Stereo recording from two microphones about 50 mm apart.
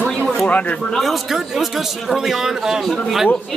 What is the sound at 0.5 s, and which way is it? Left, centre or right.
Speech, left.